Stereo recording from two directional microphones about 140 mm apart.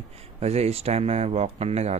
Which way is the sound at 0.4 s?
50° right (ahead or behind).